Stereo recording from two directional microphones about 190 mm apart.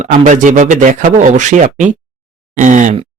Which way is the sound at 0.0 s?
40° right (ahead or behind).